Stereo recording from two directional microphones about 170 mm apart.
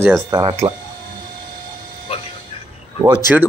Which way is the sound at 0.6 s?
30° right (ahead or behind).